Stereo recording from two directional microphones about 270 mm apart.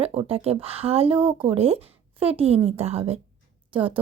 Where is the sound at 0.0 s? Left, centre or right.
Right.